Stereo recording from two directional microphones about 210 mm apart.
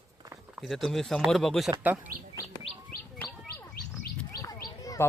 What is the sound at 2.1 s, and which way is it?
Speech, 40° right (ahead or behind).